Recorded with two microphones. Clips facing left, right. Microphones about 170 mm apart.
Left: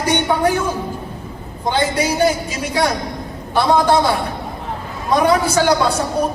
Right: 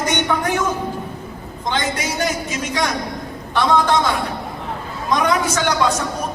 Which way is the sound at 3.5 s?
35° left (ahead or behind).